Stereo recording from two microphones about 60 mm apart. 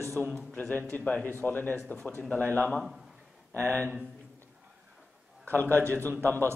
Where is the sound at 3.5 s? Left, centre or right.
Left.